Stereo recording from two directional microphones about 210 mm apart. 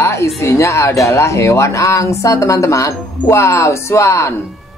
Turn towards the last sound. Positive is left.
turn(degrees=15)  # may be behind; listen again after turning